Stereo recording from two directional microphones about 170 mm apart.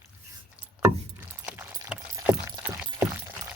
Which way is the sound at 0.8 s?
10° right (ahead or behind).